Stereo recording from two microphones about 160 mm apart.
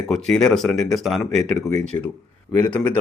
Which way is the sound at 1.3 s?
50° right (ahead or behind).